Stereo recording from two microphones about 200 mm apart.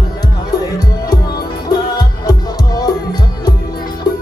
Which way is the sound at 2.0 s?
20° left (ahead or behind).